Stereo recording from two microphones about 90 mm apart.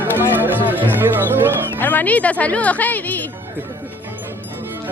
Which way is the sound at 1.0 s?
25° right (ahead or behind).